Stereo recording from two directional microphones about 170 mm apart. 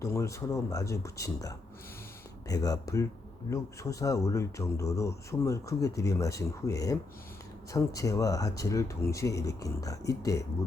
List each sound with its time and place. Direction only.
0.0 s speech: 15° left (ahead or behind)